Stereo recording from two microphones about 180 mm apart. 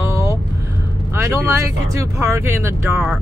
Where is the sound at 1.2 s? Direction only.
15° right (ahead or behind).